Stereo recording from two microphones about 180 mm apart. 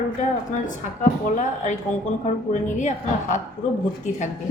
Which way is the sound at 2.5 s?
45° left (ahead or behind).